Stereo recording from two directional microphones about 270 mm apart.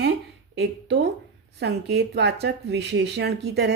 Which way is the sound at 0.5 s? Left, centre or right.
Right.